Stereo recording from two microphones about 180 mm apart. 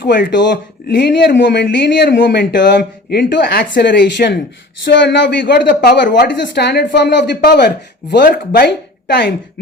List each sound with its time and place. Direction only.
0.3 s a woman's voice: 75° left (ahead or behind)
4.9 s a woman's voice: 80° left
8.1 s speech: 55° left (ahead or behind)